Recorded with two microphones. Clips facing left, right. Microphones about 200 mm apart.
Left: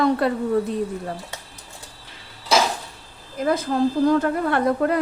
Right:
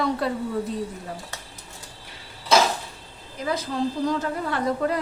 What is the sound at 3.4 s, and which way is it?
A woman's voice, 50° left (ahead or behind).